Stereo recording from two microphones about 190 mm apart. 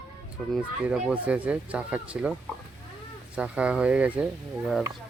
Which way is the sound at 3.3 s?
5° right (ahead or behind).